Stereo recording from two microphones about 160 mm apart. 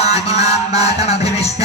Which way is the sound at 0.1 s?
40° left (ahead or behind).